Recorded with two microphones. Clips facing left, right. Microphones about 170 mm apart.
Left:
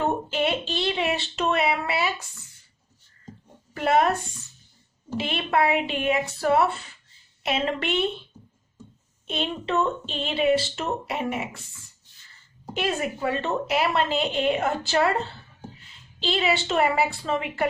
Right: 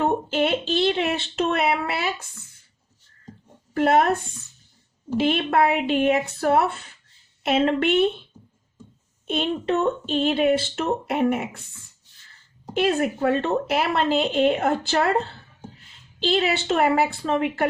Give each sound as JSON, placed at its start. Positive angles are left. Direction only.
{"t": 0.3, "sound": "a sound", "side_deg": -55}
{"t": 3.8, "sound": "a woman's voice", "side_deg": -55}
{"t": 9.8, "sound": "a woman's voice", "side_deg": -55}
{"t": 12.8, "sound": "a woman's voice", "side_deg": -55}